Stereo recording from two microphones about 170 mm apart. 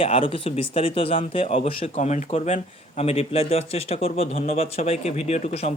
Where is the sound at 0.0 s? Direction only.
35° left (ahead or behind).